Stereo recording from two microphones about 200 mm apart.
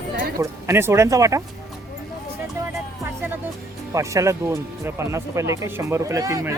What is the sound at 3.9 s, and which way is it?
Speech, 15° right (ahead or behind).